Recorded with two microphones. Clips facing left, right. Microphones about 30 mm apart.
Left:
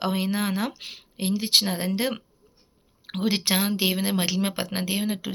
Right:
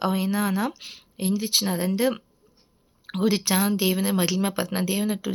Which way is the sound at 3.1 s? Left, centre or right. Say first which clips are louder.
Right 2 dB; left.